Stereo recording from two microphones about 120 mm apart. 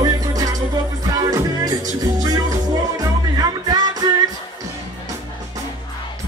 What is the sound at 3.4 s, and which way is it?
Music, 35° right (ahead or behind).